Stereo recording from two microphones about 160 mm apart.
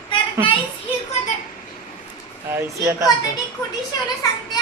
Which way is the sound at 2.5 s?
15° right (ahead or behind).